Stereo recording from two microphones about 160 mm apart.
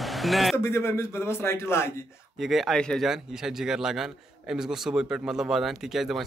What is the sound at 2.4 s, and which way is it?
Speech, centre (ahead or behind).